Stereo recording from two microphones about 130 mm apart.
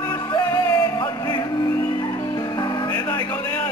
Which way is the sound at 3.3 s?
15° left (ahead or behind).